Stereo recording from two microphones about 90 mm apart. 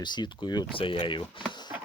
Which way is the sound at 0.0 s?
55° left (ahead or behind).